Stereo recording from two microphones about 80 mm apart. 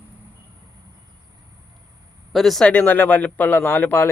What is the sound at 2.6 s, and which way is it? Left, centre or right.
Speech, centre.